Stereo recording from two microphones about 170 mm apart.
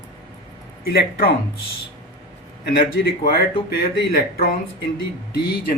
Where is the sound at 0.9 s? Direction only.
65° left (ahead or behind).